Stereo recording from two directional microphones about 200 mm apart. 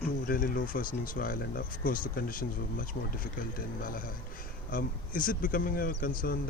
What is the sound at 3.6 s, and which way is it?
Speech, 45° left (ahead or behind).